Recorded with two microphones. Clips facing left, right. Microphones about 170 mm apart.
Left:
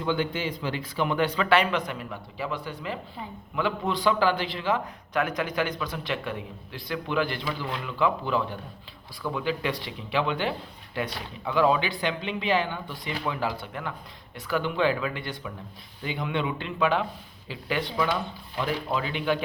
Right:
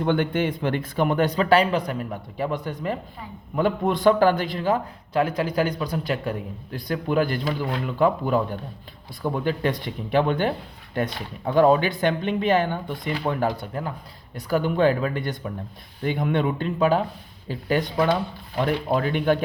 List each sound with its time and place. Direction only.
0.0 s a man's voice: 55° right (ahead or behind)
5.1 s a man's voice: 30° right (ahead or behind); by 19.4 s 50° right (ahead or behind)